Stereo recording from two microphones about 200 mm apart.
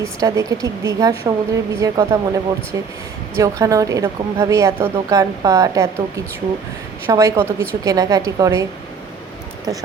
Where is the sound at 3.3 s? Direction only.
15° right (ahead or behind).